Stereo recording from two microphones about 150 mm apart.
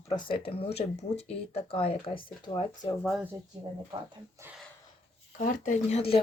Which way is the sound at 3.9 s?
30° right (ahead or behind).